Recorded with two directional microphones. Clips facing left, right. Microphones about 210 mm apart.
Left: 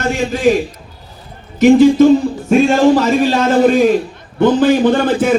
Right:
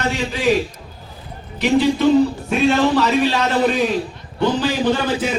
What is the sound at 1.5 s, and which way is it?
A man's voice, 45° left (ahead or behind).